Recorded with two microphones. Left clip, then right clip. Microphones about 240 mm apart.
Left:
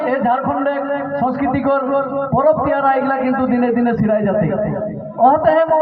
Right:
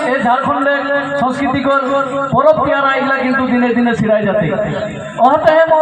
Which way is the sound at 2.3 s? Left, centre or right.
Right.